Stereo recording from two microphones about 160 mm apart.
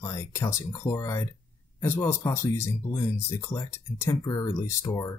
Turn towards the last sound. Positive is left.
turn(degrees=20)  # may be behind; listen again after turning